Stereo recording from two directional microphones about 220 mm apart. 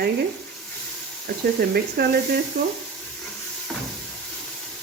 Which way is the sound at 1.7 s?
45° right (ahead or behind).